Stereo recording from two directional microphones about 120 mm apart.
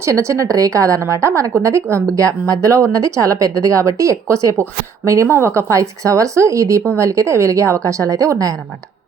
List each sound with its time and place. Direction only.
0.0 s speech: 25° right (ahead or behind)